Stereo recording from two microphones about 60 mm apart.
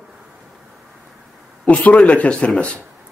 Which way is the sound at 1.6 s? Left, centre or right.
Left.